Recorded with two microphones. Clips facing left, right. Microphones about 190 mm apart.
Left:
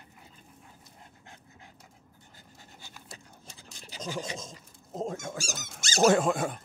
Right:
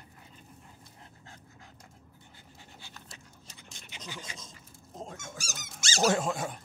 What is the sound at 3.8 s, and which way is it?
Speech, 40° left (ahead or behind).